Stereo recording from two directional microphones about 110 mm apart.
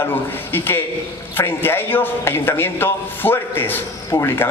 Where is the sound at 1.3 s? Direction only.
20° left (ahead or behind).